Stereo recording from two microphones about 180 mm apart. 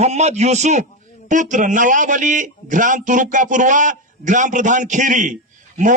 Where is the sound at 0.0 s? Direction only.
35° right (ahead or behind).